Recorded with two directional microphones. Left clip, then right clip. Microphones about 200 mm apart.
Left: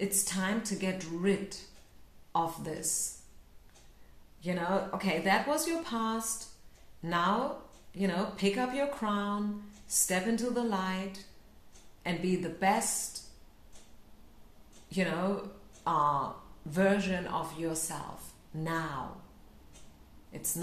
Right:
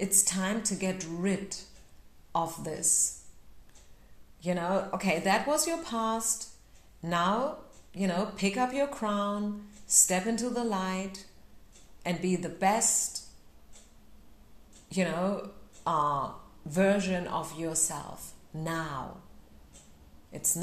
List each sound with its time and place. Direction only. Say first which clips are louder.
0.0 s a woman's voice: right 3 dB; 30° right (ahead or behind)
4.4 s a woman's voice: right 2 dB; 30° right (ahead or behind)
14.9 s a woman's voice: right 2 dB; 30° right (ahead or behind)